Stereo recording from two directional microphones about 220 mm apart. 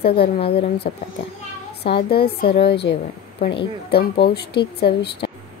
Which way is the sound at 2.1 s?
45° left (ahead or behind).